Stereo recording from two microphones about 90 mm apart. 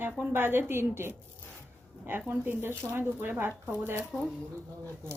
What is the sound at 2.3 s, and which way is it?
Speech, 25° right (ahead or behind).